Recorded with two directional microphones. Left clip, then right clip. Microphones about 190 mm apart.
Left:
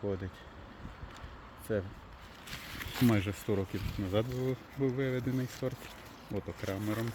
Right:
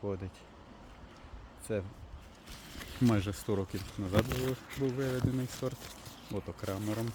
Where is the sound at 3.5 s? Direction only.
Centre (ahead or behind).